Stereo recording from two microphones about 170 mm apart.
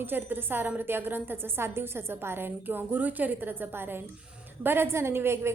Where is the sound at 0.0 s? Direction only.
10° right (ahead or behind).